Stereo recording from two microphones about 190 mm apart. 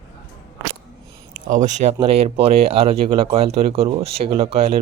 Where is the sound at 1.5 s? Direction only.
40° right (ahead or behind).